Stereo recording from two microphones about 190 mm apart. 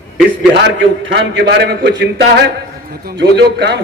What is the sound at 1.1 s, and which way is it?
A man's voice, 60° right (ahead or behind).